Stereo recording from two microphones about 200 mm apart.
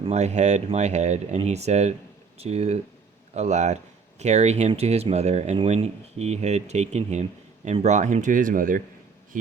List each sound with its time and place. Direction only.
0.0 s speech: 35° right (ahead or behind)